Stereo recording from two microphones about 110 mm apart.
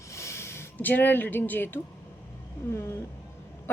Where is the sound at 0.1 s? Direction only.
25° left (ahead or behind).